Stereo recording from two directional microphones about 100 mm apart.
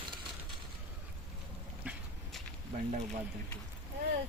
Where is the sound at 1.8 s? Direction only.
15° right (ahead or behind).